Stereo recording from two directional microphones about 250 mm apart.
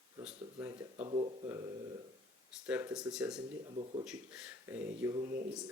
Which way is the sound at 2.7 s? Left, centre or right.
Centre.